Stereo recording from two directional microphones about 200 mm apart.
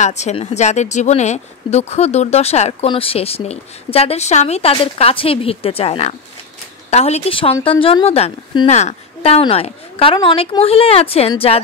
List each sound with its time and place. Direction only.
0.0 s speech: 35° left (ahead or behind)